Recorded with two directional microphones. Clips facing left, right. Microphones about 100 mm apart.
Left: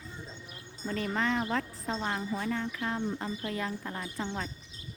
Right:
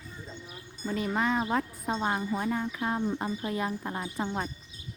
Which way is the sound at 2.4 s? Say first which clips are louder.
Right 3 dB; 15° right (ahead or behind).